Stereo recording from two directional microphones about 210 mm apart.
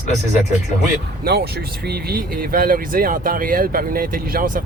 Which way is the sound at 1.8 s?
45° right (ahead or behind).